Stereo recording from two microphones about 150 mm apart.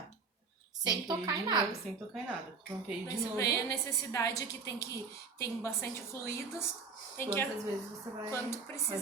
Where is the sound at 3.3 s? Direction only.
20° left (ahead or behind).